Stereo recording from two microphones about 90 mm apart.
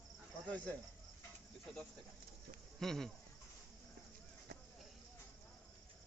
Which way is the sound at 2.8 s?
5° left (ahead or behind).